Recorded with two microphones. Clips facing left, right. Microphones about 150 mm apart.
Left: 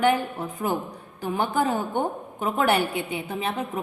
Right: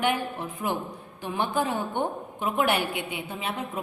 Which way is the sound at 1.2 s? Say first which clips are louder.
Left 3 dB; 40° left (ahead or behind).